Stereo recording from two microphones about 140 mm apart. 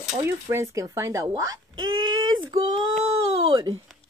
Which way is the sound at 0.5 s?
20° right (ahead or behind).